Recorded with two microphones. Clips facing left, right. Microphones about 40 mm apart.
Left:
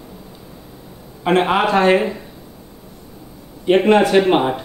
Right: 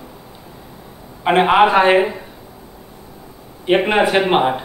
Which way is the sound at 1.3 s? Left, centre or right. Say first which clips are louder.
Right 3 dB; centre.